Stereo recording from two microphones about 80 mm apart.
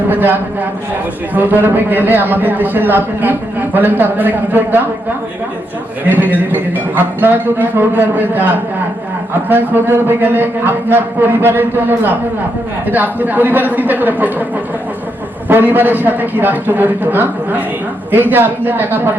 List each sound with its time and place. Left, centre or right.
0.1 s a man's voice: right
6.1 s a man's voice: right
9.5 s a man's voice: right
15.4 s a man's voice: right